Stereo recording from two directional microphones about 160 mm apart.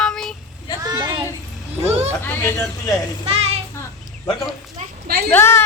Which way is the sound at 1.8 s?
40° right (ahead or behind).